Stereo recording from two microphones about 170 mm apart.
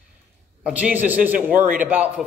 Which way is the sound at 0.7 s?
10° right (ahead or behind).